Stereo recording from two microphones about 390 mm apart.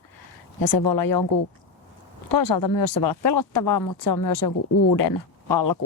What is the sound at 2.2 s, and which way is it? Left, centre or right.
Speech, left.